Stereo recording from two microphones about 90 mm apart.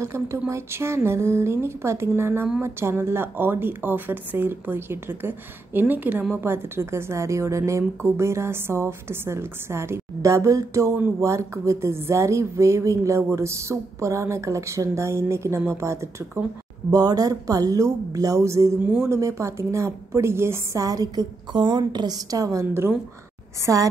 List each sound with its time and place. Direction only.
0.0 s a woman's voice: 35° right (ahead or behind)
16.9 s a woman's voice: 45° right (ahead or behind)